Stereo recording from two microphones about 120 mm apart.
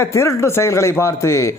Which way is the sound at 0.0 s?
25° left (ahead or behind).